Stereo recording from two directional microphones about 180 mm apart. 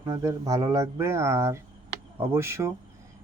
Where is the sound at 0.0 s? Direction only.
20° right (ahead or behind).